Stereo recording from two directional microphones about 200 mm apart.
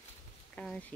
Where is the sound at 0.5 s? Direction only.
5° left (ahead or behind).